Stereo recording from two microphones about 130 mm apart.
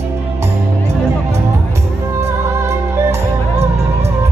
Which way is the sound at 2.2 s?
20° right (ahead or behind).